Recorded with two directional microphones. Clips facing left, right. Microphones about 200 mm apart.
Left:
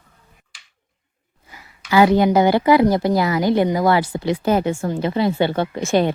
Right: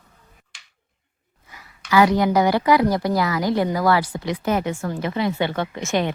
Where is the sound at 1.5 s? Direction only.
30° left (ahead or behind).